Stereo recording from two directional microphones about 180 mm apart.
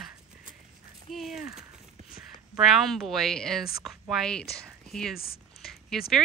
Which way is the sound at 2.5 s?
Centre (ahead or behind).